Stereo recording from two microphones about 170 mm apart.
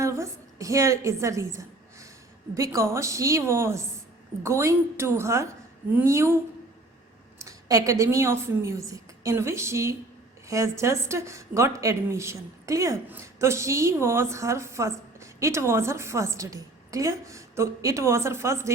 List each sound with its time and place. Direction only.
0.0 s music: 15° right (ahead or behind)
2.6 s a woman's voice: 15° right (ahead or behind)